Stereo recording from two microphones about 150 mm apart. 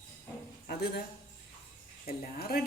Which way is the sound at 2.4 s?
90° left.